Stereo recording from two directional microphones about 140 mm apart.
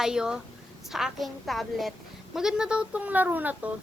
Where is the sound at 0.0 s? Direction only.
5° right (ahead or behind).